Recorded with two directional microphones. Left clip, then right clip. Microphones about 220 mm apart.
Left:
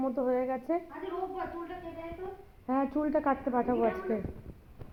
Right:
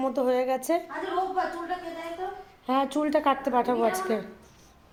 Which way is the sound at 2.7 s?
25° right (ahead or behind).